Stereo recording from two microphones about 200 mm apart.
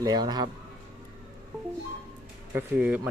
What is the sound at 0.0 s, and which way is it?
Speech, 20° right (ahead or behind).